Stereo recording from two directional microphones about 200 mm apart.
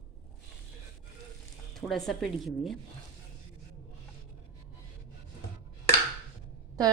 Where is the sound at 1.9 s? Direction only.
Centre (ahead or behind).